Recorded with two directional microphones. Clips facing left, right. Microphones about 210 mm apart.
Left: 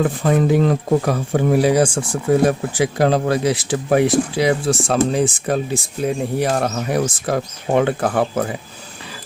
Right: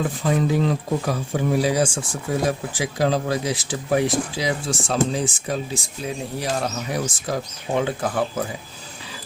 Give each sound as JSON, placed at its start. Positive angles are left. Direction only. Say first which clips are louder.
{"t": 0.0, "sound": "speech", "louder": "left 5 dB", "side_deg": 55}